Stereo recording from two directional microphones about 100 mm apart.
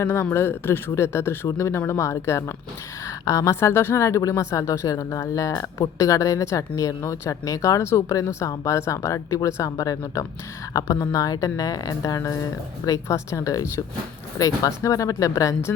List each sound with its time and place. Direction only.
0.0 s speech: 25° left (ahead or behind)